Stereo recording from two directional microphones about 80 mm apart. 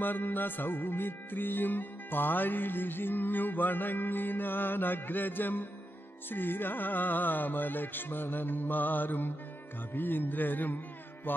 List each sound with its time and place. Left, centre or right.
0.0 s music: left